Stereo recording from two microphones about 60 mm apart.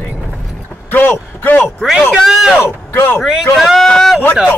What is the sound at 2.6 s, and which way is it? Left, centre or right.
Speech, left.